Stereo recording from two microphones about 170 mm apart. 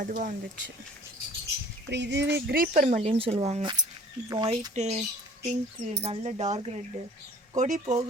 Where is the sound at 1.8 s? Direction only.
90° right; by 5.0 s 40° right (ahead or behind).